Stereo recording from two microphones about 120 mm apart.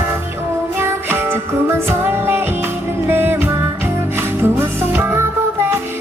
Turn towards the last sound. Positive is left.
turn(degrees=-15)  # may be behind; listen again after turning